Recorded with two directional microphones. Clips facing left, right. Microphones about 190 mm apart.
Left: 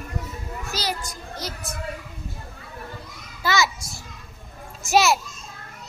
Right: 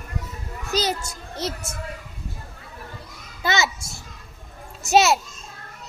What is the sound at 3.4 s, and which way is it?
Children playing, 25° right (ahead or behind).